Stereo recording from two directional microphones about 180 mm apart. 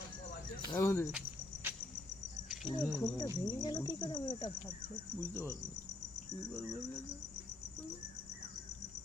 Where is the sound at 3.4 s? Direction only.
20° left (ahead or behind).